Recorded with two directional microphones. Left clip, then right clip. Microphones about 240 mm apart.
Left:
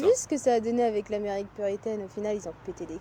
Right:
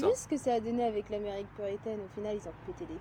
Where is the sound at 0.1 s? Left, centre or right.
Left.